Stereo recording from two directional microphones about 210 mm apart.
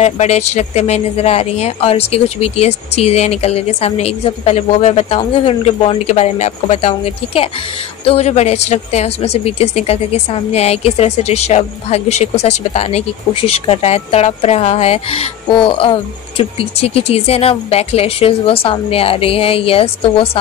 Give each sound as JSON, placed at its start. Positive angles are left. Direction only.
{"t": 0.0, "sound": "speech", "side_deg": 30}